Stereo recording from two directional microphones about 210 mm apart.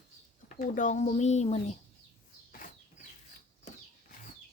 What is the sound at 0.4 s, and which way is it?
Speech, 35° left (ahead or behind).